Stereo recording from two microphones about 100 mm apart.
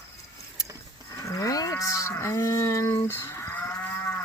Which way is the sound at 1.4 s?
35° left (ahead or behind).